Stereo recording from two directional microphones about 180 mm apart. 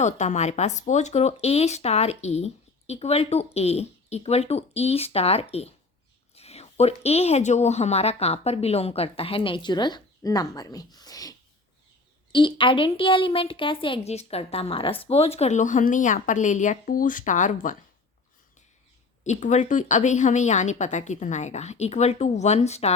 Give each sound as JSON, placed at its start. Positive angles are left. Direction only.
{"t": 0.0, "sound": "a woman's voice", "side_deg": 40}
{"t": 19.2, "sound": "speech", "side_deg": 40}